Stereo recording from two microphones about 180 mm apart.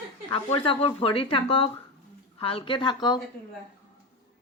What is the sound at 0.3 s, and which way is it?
Speech, 30° left (ahead or behind).